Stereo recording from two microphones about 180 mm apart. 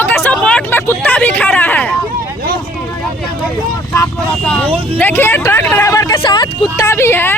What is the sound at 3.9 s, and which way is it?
Vehicle, 5° left (ahead or behind).